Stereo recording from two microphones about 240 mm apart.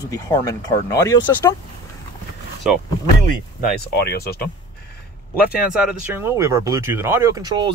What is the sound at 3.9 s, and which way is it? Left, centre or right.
Speech, left.